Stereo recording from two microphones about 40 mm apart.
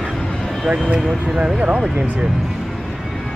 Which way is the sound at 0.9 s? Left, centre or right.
Centre.